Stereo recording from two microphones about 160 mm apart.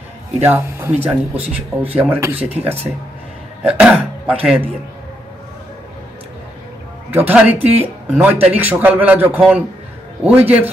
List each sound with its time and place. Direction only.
0.4 s speech: 10° right (ahead or behind)
1.4 s speech: 40° right (ahead or behind)
2.0 s speech: 15° right (ahead or behind)
3.6 s speech: 5° right (ahead or behind)
7.1 s speech: 10° right (ahead or behind)